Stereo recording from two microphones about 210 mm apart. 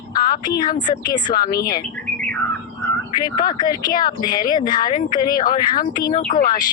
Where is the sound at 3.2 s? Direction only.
20° left (ahead or behind).